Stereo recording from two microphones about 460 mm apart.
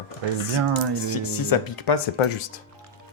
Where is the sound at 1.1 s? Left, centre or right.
Left.